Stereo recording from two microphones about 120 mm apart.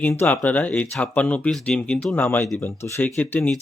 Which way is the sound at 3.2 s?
15° left (ahead or behind).